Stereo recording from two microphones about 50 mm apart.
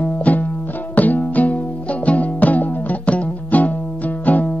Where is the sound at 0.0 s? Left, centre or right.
Left.